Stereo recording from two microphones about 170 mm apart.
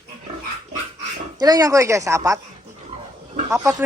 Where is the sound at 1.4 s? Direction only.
20° right (ahead or behind).